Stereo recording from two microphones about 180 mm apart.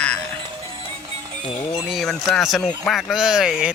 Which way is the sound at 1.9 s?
Centre (ahead or behind).